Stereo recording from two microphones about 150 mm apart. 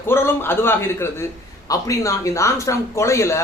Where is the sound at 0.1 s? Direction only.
15° left (ahead or behind).